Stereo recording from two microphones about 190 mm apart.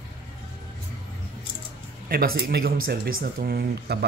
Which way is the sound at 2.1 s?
50° right (ahead or behind).